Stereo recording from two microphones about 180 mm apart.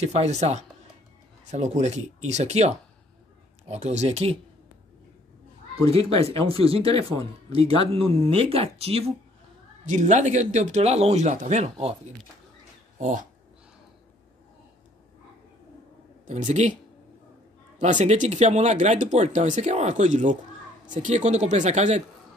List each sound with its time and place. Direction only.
0.0 s speech: 35° right (ahead or behind)
5.9 s speech: 30° right (ahead or behind)
13.0 s speech: 45° right (ahead or behind)
16.3 s speech: 45° right (ahead or behind)
17.7 s speech: 40° right (ahead or behind)